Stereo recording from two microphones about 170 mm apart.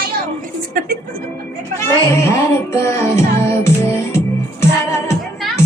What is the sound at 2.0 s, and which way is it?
Music, 15° left (ahead or behind).